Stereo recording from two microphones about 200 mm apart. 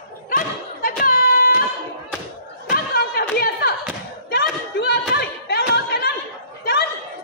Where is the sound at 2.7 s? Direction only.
50° left (ahead or behind).